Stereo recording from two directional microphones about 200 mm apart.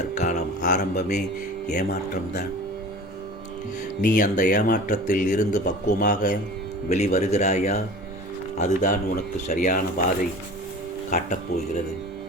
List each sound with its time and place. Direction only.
0.1 s mantra: 35° left (ahead or behind)
4.0 s speech: 40° left (ahead or behind)
11.1 s speech: 40° left (ahead or behind)